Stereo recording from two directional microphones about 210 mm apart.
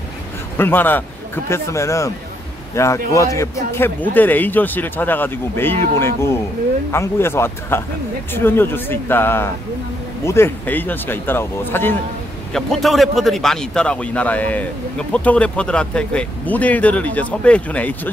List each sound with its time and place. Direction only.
0.6 s speech: 10° left (ahead or behind)